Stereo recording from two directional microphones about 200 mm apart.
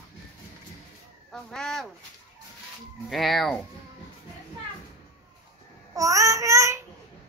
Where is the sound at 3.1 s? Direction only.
Centre (ahead or behind).